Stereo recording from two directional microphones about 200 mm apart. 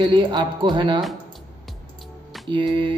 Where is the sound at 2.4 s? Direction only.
25° right (ahead or behind).